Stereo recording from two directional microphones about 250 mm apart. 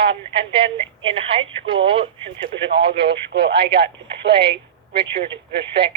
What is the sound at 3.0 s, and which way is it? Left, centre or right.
Speech, right.